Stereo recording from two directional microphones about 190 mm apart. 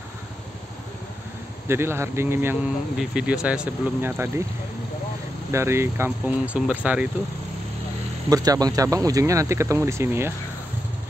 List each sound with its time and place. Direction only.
1.7 s speech: 15° right (ahead or behind)
5.5 s speech: 15° right (ahead or behind)
8.3 s speech: 20° right (ahead or behind)